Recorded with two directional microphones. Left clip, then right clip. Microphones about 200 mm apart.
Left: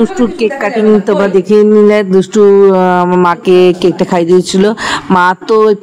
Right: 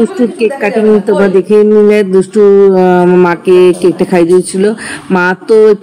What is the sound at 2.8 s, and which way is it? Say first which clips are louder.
Speech: right 2 dB; 10° left (ahead or behind).